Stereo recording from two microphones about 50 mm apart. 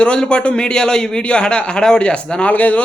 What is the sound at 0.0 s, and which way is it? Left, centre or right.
A man's voice, centre.